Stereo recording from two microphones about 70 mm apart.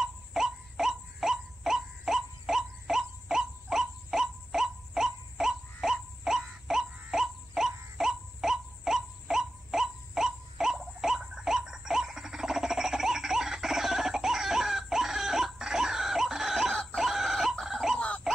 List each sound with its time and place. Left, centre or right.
0.0 s wail: centre
16.7 s chicken: centre
17.9 s a sound: centre